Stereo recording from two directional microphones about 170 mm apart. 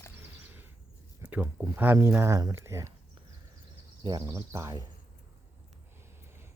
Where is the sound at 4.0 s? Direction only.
25° right (ahead or behind).